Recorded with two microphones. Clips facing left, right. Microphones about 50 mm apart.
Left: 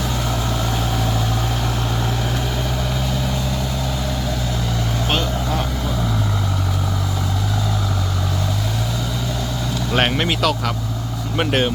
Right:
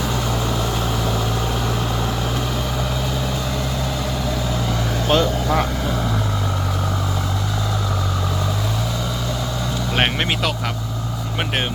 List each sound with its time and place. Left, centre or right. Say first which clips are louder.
9.9 s vehicle: left 2 dB; centre
11.3 s speech: left 5 dB; centre